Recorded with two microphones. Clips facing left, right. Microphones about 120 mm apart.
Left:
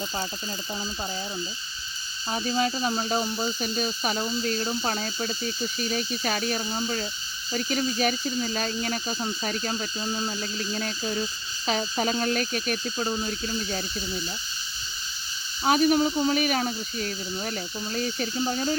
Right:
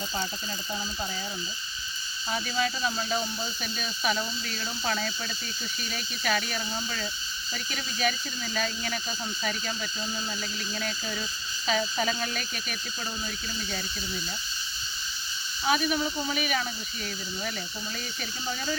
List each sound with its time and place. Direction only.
2.3 s speech: 30° left (ahead or behind)
15.6 s speech: 40° left (ahead or behind)